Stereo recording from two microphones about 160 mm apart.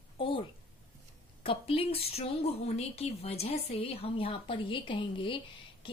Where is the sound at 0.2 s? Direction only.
35° left (ahead or behind).